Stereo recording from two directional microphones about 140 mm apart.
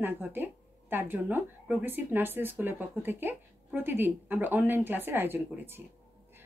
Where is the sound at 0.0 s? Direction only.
15° right (ahead or behind).